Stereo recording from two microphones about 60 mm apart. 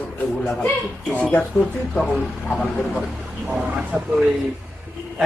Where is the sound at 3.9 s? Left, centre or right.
Centre.